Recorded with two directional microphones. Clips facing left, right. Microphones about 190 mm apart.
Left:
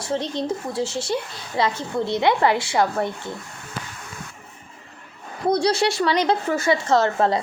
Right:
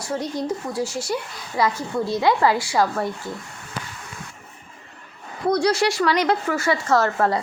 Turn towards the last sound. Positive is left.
turn(degrees=20)  # may be behind; listen again after turning